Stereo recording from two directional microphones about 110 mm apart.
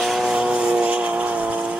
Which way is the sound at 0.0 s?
5° right (ahead or behind).